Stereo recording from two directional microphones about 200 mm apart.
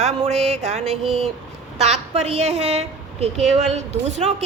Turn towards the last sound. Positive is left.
turn(degrees=-35)  # may be behind; listen again after turning